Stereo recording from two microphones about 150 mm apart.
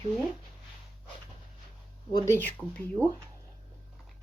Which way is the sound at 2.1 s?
20° left (ahead or behind).